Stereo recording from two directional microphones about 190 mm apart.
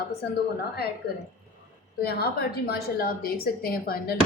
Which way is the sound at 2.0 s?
55° left (ahead or behind).